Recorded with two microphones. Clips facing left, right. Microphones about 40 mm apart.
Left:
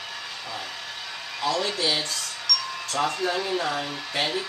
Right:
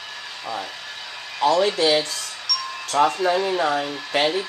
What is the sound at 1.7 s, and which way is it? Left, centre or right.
Speech, right.